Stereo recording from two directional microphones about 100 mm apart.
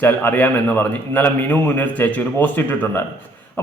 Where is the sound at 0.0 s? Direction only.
20° left (ahead or behind).